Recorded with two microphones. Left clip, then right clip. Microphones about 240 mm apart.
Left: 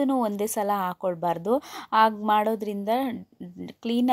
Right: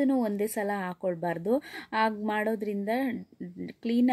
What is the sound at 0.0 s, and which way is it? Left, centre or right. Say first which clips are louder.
A woman's voice: left 3 dB; left.